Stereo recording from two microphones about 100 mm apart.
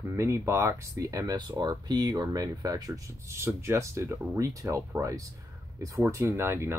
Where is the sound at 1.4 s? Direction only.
50° right (ahead or behind); by 6.8 s 25° right (ahead or behind).